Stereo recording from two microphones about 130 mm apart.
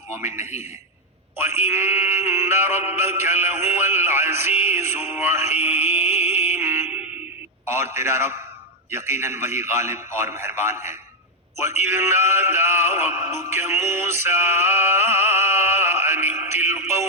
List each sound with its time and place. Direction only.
1.4 s music: 15° right (ahead or behind)
7.7 s a man's voice: 20° right (ahead or behind)
11.8 s music: 20° right (ahead or behind)